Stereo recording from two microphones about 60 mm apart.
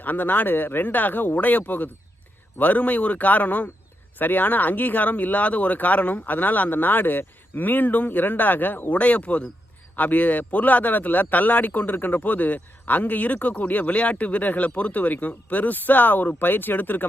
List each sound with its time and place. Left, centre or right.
0.0 s a man's voice: left